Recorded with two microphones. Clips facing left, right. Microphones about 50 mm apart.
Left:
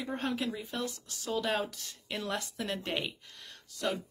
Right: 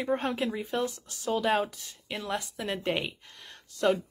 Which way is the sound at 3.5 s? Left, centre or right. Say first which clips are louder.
Right 8 dB; right.